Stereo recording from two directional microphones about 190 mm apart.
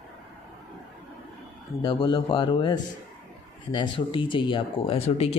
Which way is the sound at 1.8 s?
20° left (ahead or behind).